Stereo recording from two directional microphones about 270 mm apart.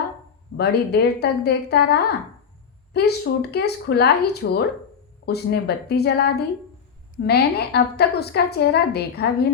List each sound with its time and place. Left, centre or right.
0.5 s a woman's voice: left